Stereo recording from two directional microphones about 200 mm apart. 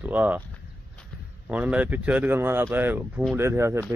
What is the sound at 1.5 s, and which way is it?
Speech, 5° right (ahead or behind).